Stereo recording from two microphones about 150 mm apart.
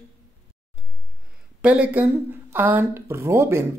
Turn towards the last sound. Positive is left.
turn(degrees=-15)  # may be behind; listen again after turning